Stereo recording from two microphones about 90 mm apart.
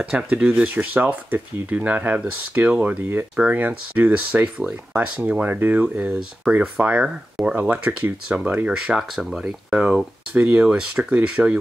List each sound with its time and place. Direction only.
0.0 s speech: 10° right (ahead or behind)